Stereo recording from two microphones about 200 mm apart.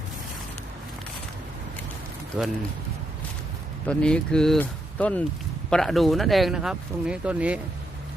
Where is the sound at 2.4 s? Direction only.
5° right (ahead or behind).